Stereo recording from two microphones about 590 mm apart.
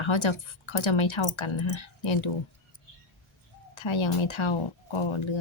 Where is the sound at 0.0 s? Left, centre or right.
Left.